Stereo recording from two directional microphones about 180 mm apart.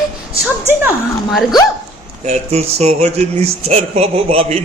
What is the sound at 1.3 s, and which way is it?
Speech, centre (ahead or behind).